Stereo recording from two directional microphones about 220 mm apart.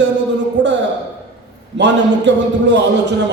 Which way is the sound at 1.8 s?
55° right (ahead or behind).